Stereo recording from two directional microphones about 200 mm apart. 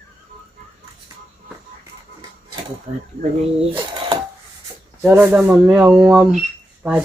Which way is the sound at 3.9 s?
25° right (ahead or behind).